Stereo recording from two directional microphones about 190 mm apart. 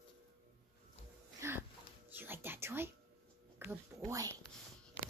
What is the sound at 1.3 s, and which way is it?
Dog, 15° right (ahead or behind).